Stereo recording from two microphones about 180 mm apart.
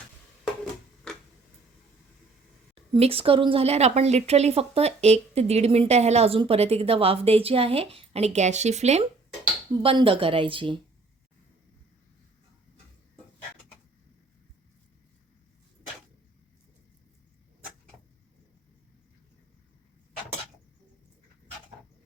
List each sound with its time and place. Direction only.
2.7 s a woman's voice: 30° right (ahead or behind)